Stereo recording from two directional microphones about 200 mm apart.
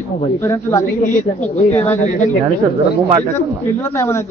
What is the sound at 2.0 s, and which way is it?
Speech, 40° left (ahead or behind).